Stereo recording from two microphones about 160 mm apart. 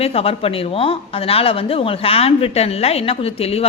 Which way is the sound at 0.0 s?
40° left (ahead or behind).